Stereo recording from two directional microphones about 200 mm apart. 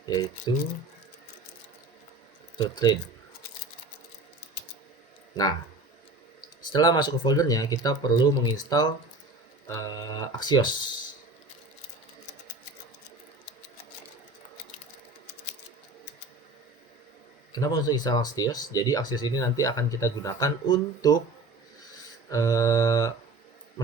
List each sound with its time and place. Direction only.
0.0 s speech: 20° left (ahead or behind)
2.6 s speech: 20° left (ahead or behind)
6.7 s speech: 20° left (ahead or behind)
17.5 s speech: 20° left (ahead or behind)
22.3 s speech: 15° left (ahead or behind)